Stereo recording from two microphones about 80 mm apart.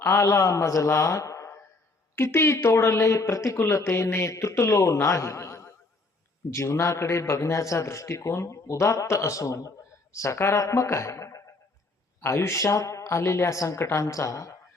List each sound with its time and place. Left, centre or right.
0.0 s a man's voice: left